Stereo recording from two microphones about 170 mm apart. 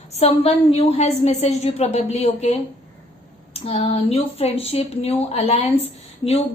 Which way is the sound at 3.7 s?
35° left (ahead or behind).